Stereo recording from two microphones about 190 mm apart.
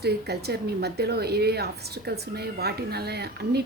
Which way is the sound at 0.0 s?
60° right (ahead or behind).